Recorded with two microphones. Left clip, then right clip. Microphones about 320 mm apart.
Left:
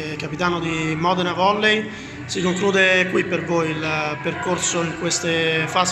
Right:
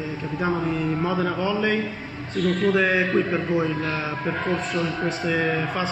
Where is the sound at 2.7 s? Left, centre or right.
Centre.